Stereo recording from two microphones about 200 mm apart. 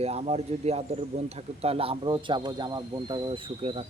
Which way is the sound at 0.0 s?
30° right (ahead or behind).